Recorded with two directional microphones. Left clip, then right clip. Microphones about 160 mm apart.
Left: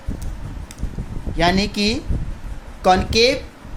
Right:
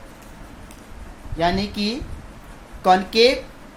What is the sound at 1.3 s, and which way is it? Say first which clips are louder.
Speech: left 3 dB; 35° left (ahead or behind).